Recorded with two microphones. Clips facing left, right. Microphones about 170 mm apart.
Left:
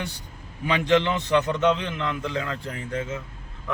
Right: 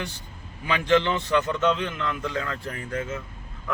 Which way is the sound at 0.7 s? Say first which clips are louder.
Left 1 dB; 20° left (ahead or behind).